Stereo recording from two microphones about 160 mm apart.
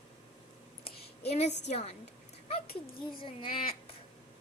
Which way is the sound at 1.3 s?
45° left (ahead or behind).